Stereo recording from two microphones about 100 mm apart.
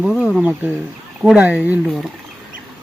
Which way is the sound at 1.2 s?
15° right (ahead or behind).